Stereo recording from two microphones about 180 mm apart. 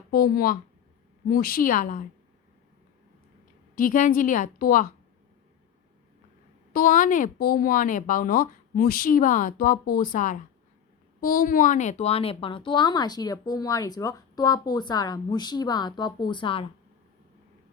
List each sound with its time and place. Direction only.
0.1 s speech: 55° left (ahead or behind)
3.8 s speech: 50° left (ahead or behind)
6.7 s speech: 50° left (ahead or behind); by 16.6 s 30° left (ahead or behind)